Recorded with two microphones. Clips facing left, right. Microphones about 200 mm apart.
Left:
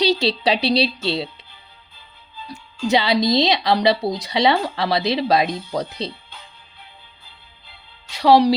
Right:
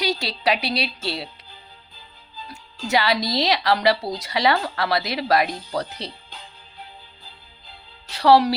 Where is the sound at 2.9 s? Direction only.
20° left (ahead or behind).